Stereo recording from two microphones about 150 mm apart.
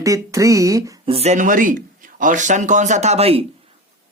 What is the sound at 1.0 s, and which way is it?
Speech, 45° right (ahead or behind).